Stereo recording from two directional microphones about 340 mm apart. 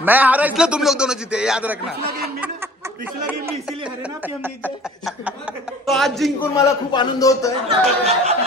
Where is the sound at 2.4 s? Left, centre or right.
Centre.